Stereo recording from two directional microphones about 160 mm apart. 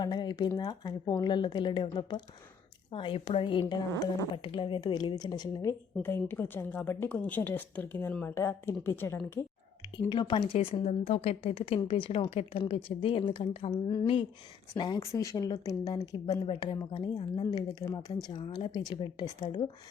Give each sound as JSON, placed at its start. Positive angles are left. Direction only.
{"t": 0.0, "sound": "a woman's voice", "side_deg": 25}
{"t": 10.1, "sound": "a woman's voice", "side_deg": 30}
{"t": 11.8, "sound": "a woman's voice", "side_deg": 30}
{"t": 13.8, "sound": "speech", "side_deg": 20}